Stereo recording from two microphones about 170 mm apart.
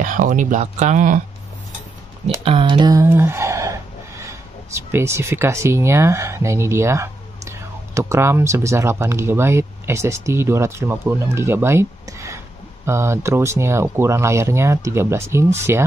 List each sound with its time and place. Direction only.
0.0 s speech: 50° right (ahead or behind)
2.4 s speech: 30° right (ahead or behind)